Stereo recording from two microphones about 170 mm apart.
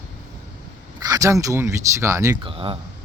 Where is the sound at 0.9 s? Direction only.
20° right (ahead or behind).